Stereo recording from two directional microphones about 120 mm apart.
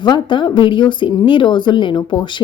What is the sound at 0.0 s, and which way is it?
Speech, 40° left (ahead or behind).